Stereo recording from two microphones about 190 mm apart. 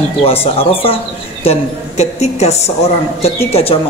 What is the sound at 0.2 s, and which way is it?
A woman's voice, 30° left (ahead or behind).